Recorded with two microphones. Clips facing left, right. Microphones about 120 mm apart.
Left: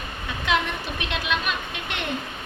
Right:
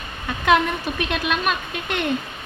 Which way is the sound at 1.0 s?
50° right (ahead or behind).